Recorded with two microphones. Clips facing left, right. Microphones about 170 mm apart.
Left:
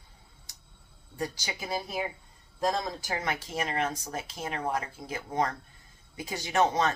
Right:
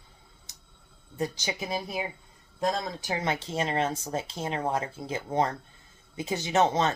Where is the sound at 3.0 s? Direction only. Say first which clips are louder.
Right 3 dB; 25° right (ahead or behind).